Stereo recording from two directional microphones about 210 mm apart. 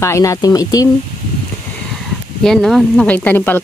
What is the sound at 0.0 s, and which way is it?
Speech, 15° left (ahead or behind).